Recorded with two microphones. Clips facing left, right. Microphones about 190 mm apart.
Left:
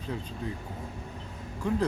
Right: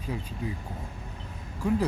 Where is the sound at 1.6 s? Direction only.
10° right (ahead or behind).